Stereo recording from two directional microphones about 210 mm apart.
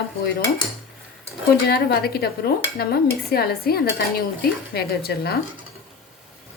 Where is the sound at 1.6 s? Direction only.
50° left (ahead or behind).